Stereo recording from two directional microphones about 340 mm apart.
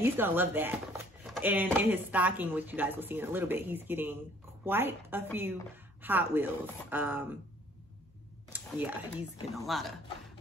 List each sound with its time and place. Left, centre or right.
0.0 s speech: centre
8.5 s speech: centre